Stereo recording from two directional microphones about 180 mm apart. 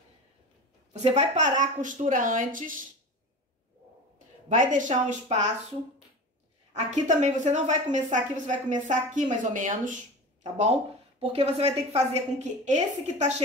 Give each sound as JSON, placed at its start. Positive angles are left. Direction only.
{"t": 1.0, "sound": "a woman's voice", "side_deg": -40}
{"t": 4.5, "sound": "a woman's voice", "side_deg": -45}
{"t": 6.7, "sound": "a woman's voice", "side_deg": -40}